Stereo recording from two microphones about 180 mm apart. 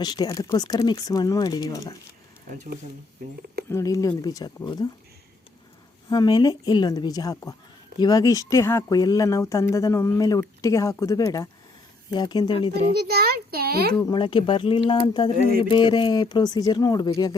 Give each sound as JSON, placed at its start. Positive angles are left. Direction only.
{"t": 0.0, "sound": "speech", "side_deg": 20}
{"t": 3.7, "sound": "speech", "side_deg": 15}
{"t": 6.1, "sound": "speech", "side_deg": 20}
{"t": 13.0, "sound": "a child's voice", "side_deg": -60}
{"t": 14.0, "sound": "speech", "side_deg": 25}